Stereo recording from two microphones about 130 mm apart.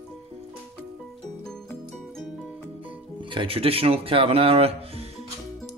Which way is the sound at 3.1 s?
40° right (ahead or behind).